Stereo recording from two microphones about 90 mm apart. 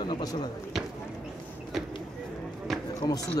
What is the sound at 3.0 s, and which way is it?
Speech, 40° left (ahead or behind).